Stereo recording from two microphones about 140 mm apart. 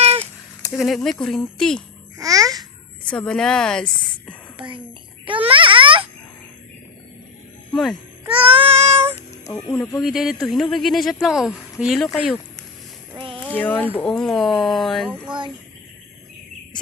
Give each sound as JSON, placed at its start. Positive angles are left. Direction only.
{"t": 0.0, "sound": "cat", "side_deg": -50}
{"t": 0.7, "sound": "speech", "side_deg": 0}
{"t": 2.1, "sound": "babbling", "side_deg": -25}
{"t": 3.1, "sound": "speech", "side_deg": 5}
{"t": 4.5, "sound": "speech", "side_deg": -35}
{"t": 5.5, "sound": "a sound", "side_deg": -40}
{"t": 7.7, "sound": "speech", "side_deg": 0}
{"t": 8.5, "sound": "child singing", "side_deg": -45}
{"t": 9.5, "sound": "speech", "side_deg": 15}
{"t": 10.0, "sound": "speech", "side_deg": 0}
{"t": 13.5, "sound": "speech", "side_deg": 10}
{"t": 15.1, "sound": "child singing", "side_deg": -5}